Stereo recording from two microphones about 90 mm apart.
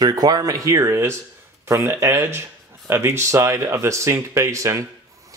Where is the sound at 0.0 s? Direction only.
45° right (ahead or behind).